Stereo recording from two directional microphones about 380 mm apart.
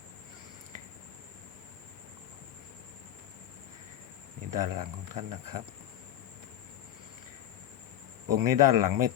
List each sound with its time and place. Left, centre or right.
4.5 s speech: right
8.3 s speech: right